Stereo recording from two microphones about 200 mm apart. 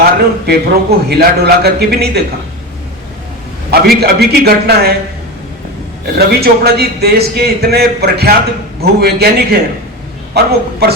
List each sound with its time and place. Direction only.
0.0 s a man's voice: 50° right (ahead or behind)
3.7 s a man's voice: 50° right (ahead or behind)
6.1 s a man's voice: 50° right (ahead or behind)